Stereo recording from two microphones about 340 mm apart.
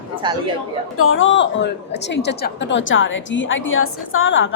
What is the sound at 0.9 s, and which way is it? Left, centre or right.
A woman's voice, left.